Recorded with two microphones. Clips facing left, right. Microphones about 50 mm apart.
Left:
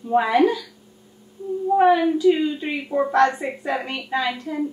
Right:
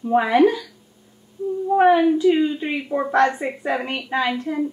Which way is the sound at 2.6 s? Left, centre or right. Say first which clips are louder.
Even; centre.